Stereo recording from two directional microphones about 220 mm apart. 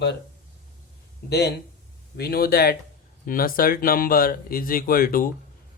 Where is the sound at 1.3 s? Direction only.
50° left (ahead or behind).